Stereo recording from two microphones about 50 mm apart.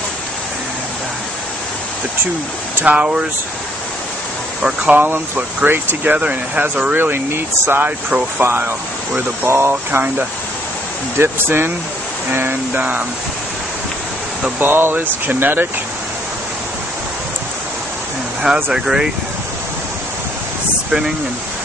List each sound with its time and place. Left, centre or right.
2.8 s speech: right
4.8 s speech: right
7.0 s speech: right
14.6 s speech: right
18.4 s speech: centre